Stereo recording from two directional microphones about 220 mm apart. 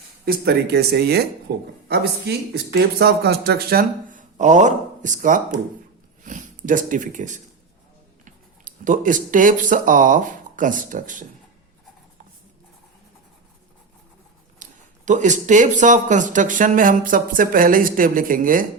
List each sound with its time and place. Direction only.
0.3 s speech: 45° right (ahead or behind)
14.6 s speech: 35° right (ahead or behind)